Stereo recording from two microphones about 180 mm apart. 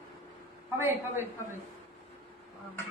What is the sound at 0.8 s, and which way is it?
Speech, 10° right (ahead or behind).